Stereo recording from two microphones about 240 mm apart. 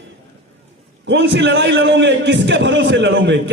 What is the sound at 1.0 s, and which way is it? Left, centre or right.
A man's voice, right.